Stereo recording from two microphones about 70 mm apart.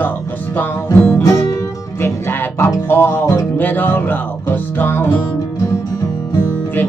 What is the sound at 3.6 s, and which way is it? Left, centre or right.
Music, left.